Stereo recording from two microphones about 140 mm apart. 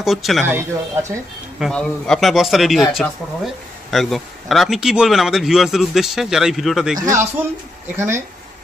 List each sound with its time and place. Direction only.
0.0 s speech: centre (ahead or behind)
0.5 s speech: 20° right (ahead or behind)
1.6 s speech: 5° left (ahead or behind)
7.1 s speech: 20° right (ahead or behind)